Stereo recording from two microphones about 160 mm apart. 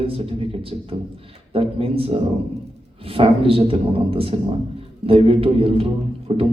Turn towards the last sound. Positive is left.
turn(degrees=-35)  # may be behind; listen again after turning